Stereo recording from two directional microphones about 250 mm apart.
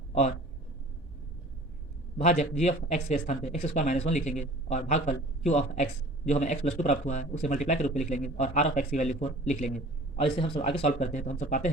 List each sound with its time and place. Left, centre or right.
0.1 s speech: left
2.1 s speech: left